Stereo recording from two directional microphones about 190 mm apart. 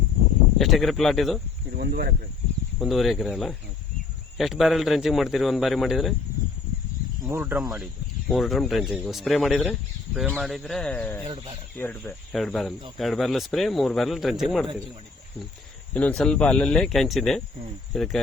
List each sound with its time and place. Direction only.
0.6 s a man's voice: centre (ahead or behind)
1.7 s speech: 55° right (ahead or behind)
2.7 s a man's voice: centre (ahead or behind)
7.3 s speech: 10° right (ahead or behind)
8.3 s a man's voice: centre (ahead or behind)
15.9 s a man's voice: 5° left (ahead or behind)